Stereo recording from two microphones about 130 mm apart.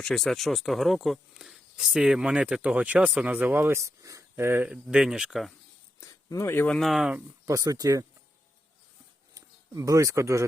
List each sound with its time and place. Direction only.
0.0 s speech: 5° left (ahead or behind); by 4.7 s 20° right (ahead or behind)
4.7 s speech: 5° right (ahead or behind)
6.0 s speech: 25° left (ahead or behind)
6.7 s speech: centre (ahead or behind)
7.4 s speech: 25° right (ahead or behind)
9.3 s speech: 25° right (ahead or behind)